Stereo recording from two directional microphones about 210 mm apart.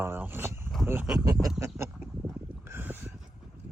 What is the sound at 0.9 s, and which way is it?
Speech, 10° right (ahead or behind).